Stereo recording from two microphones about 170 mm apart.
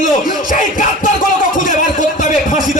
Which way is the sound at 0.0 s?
50° left (ahead or behind).